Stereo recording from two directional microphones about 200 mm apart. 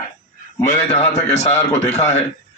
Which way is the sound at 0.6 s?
35° left (ahead or behind).